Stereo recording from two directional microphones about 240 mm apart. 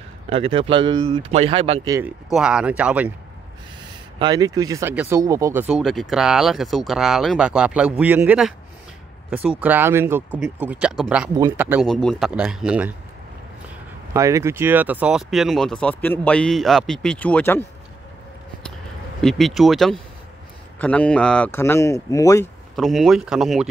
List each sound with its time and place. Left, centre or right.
0.3 s speech: right
2.3 s speech: centre
4.2 s speech: centre
14.1 s speech: centre
19.2 s speech: centre
22.8 s speech: centre